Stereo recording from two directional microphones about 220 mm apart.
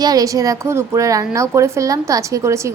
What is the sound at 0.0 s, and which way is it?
A woman's voice, 15° right (ahead or behind).